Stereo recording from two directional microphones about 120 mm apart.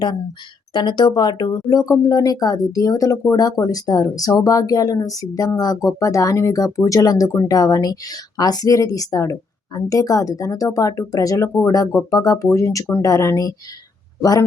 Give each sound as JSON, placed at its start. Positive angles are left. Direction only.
{"t": 0.7, "sound": "speech", "side_deg": 40}